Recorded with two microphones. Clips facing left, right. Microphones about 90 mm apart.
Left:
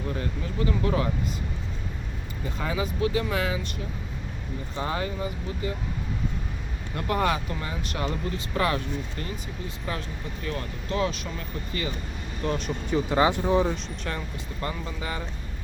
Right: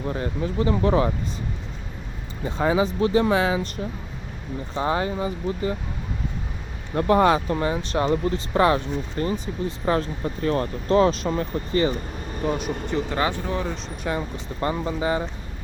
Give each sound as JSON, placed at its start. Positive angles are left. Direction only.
{"t": 0.0, "sound": "speech", "side_deg": -30}
{"t": 2.4, "sound": "speech", "side_deg": -35}
{"t": 4.7, "sound": "speech", "side_deg": -30}
{"t": 6.9, "sound": "speech", "side_deg": -30}
{"t": 12.4, "sound": "speech", "side_deg": -10}
{"t": 12.9, "sound": "speech", "side_deg": 15}
{"t": 14.2, "sound": "speech", "side_deg": -30}